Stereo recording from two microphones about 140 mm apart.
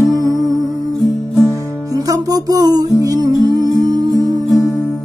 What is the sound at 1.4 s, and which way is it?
Music, 20° right (ahead or behind).